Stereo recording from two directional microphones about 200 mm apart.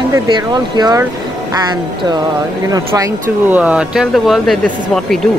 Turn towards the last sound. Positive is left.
turn(degrees=0)  # may be behind; listen again after turning